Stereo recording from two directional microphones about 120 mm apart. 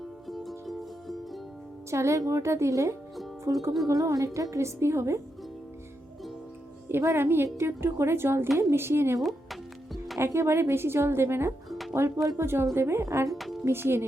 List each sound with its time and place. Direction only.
0.3 s music: centre (ahead or behind)
1.9 s speech: 25° right (ahead or behind)
6.8 s speech: 20° right (ahead or behind)
9.2 s music: centre (ahead or behind)
10.2 s speech: 25° right (ahead or behind)
11.7 s music: centre (ahead or behind)
11.9 s speech: 25° right (ahead or behind)
13.3 s music: centre (ahead or behind)
13.7 s speech: 20° right (ahead or behind)